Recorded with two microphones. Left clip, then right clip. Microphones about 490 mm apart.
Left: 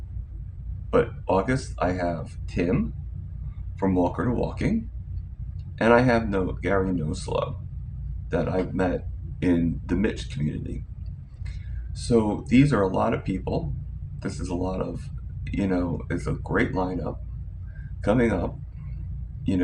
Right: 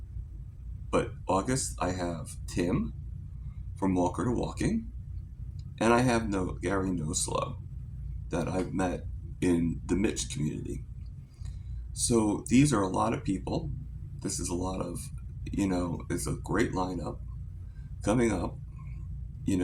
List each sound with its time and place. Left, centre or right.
0.9 s speech: right
3.8 s speech: right
5.7 s speech: right
12.0 s speech: right